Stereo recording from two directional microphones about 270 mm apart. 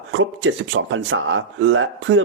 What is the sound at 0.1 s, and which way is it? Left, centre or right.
Speech, right.